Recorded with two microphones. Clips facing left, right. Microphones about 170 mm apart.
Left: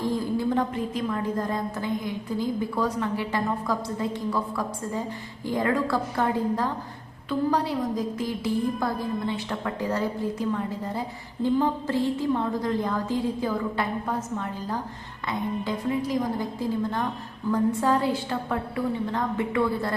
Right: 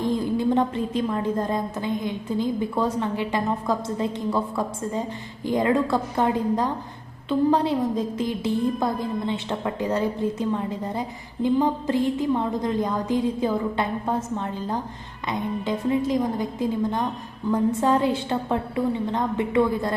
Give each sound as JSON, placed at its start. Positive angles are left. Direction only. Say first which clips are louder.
{"t": 0.0, "sound": "a woman's voice", "louder": "right 3 dB", "side_deg": -20}